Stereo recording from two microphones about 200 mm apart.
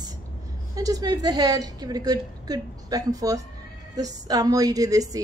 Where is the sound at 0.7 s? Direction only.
20° right (ahead or behind).